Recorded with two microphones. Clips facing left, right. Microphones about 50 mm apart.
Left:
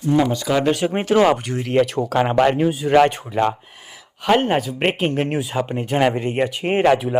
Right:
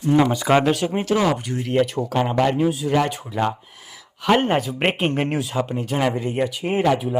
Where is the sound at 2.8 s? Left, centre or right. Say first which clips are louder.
Left 9 dB; left.